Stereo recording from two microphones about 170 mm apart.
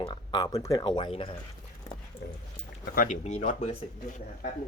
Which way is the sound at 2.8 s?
55° left (ahead or behind).